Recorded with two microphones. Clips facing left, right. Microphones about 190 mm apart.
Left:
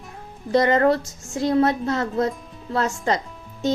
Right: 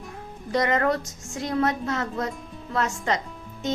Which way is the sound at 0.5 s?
30° left (ahead or behind).